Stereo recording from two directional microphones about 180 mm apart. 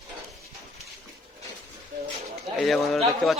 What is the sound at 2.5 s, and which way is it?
Speech, centre (ahead or behind).